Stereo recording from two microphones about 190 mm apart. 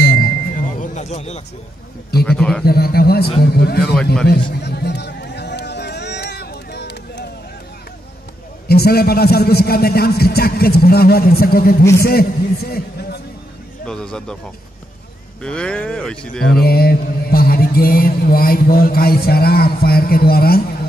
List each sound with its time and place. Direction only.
0.2 s music: 45° left (ahead or behind)
2.2 s speech: 5° left (ahead or behind)
2.6 s a man's voice: 55° left (ahead or behind)
3.9 s speech: 5° left (ahead or behind)
4.3 s run: 55° left (ahead or behind)
8.6 s a man's voice: 55° left (ahead or behind)
13.8 s speech: 5° left (ahead or behind)
15.4 s speech: 5° left (ahead or behind)
16.5 s mantra: 55° left (ahead or behind)